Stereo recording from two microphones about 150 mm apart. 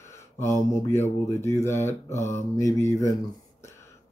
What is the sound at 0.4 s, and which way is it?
Speech, 20° left (ahead or behind).